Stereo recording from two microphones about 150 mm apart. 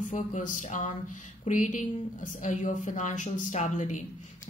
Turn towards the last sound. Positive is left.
turn(degrees=55)  # may be behind; listen again after turning